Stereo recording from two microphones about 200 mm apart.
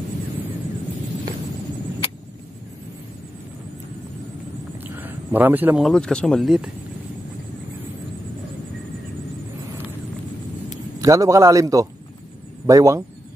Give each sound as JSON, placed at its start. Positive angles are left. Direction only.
{"t": 4.8, "sound": "speech", "side_deg": -10}
{"t": 11.0, "sound": "a man's voice", "side_deg": -15}